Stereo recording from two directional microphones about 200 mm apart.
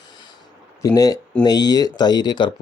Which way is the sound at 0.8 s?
20° left (ahead or behind).